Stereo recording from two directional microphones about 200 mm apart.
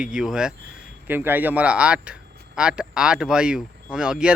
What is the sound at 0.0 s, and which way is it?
Speech, 5° right (ahead or behind).